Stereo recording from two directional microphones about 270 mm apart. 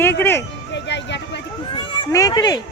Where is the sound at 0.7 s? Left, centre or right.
Left.